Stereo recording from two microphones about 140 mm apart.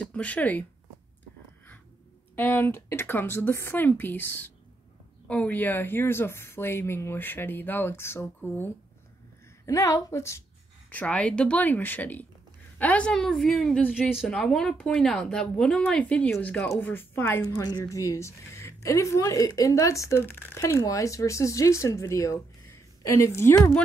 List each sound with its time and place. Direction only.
0.0 s speech: 10° left (ahead or behind)
2.3 s a woman's voice: 15° left (ahead or behind)
10.9 s a woman's voice: 10° left (ahead or behind)